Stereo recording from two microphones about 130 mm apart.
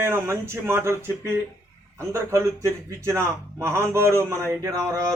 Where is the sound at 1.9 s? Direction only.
20° right (ahead or behind).